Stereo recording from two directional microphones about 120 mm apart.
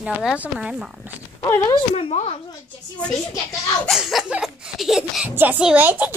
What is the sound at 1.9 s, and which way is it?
Speech, 55° left (ahead or behind).